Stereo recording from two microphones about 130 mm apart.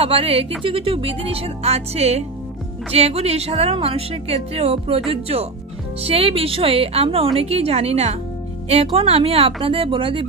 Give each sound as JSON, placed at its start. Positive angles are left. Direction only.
{"t": 0.0, "sound": "a woman's voice", "side_deg": -50}